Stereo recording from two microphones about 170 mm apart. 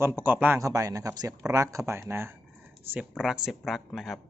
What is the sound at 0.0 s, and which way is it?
Speech, 15° right (ahead or behind).